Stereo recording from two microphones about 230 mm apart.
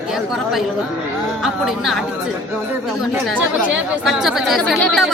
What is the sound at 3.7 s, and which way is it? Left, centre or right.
Speech, centre.